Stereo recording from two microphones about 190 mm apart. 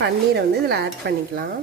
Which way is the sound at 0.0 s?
60° right (ahead or behind).